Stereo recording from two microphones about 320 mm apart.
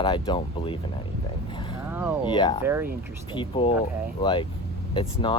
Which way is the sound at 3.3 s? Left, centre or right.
Centre.